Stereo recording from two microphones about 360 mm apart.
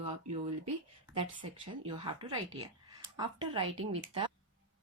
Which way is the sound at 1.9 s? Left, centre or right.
Centre.